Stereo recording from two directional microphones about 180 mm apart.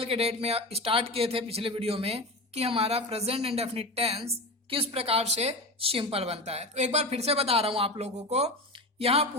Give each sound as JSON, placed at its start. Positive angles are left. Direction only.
{"t": 0.0, "sound": "speech", "side_deg": -35}